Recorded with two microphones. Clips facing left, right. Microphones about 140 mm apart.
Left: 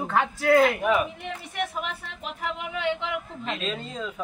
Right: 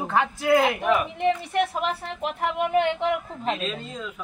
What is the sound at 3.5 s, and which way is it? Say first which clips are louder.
Speech: even; 35° left (ahead or behind).